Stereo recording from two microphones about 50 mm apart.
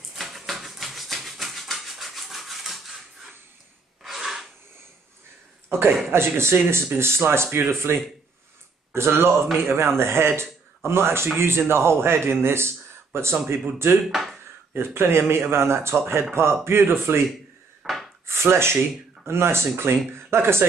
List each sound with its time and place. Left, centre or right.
0.1 s a sound: centre
4.0 s a sound: centre
5.7 s speech: right
14.0 s speech: centre
14.7 s speech: right
17.8 s wood: centre
18.2 s speech: right